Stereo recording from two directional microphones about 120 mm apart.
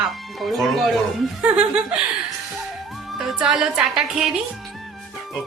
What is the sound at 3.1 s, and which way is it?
A woman's voice, 5° right (ahead or behind).